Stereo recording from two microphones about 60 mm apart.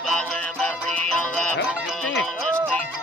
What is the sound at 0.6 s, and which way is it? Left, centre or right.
Music, left.